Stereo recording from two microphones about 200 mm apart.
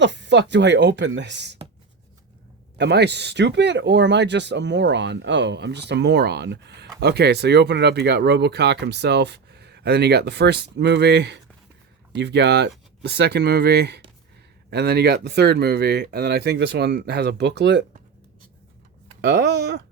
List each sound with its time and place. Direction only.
0.0 s speech: 60° right (ahead or behind)
2.7 s speech: 55° right (ahead or behind)
19.2 s speech: 60° right (ahead or behind)